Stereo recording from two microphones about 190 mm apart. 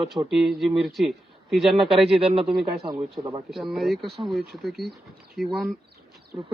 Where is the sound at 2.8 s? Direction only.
25° right (ahead or behind).